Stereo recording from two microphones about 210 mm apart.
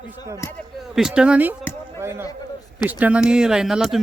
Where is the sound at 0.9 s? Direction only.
5° right (ahead or behind).